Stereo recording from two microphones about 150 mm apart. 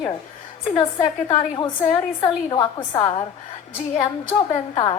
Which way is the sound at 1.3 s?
30° left (ahead or behind).